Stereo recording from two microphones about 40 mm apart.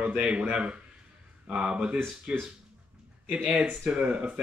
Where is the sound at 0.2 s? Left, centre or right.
Right.